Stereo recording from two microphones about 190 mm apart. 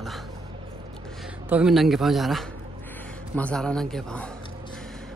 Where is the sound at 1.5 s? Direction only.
5° right (ahead or behind).